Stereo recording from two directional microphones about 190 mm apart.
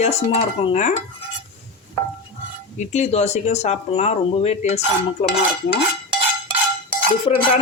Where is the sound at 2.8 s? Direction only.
35° left (ahead or behind).